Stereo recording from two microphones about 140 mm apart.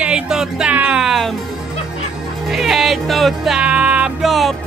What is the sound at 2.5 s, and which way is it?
Music, centre (ahead or behind).